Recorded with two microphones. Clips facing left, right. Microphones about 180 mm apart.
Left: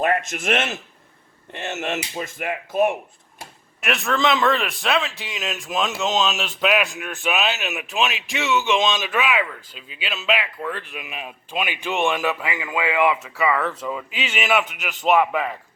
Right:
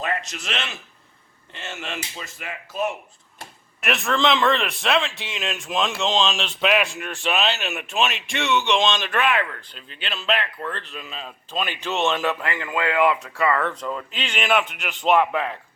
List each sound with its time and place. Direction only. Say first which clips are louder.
0.0 s speech: left 7 dB; 55° left (ahead or behind)
3.8 s speech: even; centre (ahead or behind)